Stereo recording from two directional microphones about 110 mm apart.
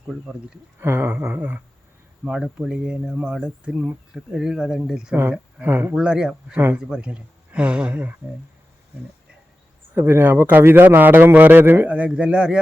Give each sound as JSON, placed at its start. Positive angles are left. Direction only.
{"t": 0.8, "sound": "a sound", "side_deg": -20}
{"t": 2.2, "sound": "speech", "side_deg": -10}
{"t": 5.3, "sound": "speech", "side_deg": -15}
{"t": 5.9, "sound": "speech", "side_deg": -10}
{"t": 9.9, "sound": "speech", "side_deg": -20}